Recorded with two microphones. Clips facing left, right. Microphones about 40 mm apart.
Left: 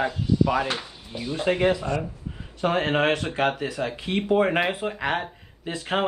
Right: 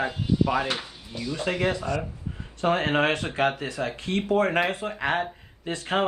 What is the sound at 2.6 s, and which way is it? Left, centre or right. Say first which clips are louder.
Speech: left 1 dB; centre.